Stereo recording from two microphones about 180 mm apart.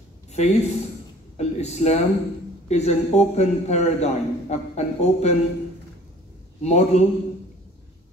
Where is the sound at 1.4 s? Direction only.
40° left (ahead or behind).